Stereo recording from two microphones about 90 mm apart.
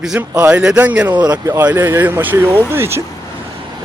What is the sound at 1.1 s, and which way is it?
Speech, 50° right (ahead or behind).